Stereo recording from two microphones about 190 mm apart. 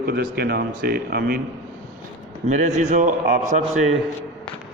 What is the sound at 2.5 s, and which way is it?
Speech, 40° right (ahead or behind).